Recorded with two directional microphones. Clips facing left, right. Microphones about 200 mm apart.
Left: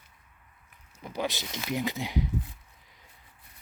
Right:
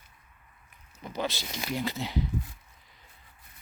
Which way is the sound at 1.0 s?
10° left (ahead or behind).